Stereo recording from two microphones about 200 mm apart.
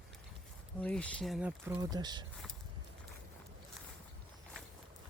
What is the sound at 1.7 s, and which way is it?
Speech, 20° right (ahead or behind).